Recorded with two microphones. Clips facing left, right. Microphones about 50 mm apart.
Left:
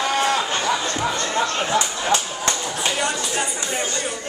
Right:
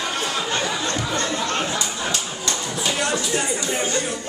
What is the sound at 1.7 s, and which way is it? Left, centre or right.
Music, left.